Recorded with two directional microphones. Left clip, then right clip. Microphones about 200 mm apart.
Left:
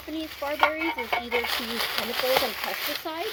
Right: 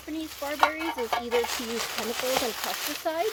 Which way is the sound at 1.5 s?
40° left (ahead or behind).